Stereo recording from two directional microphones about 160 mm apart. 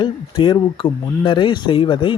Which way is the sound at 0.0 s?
30° left (ahead or behind).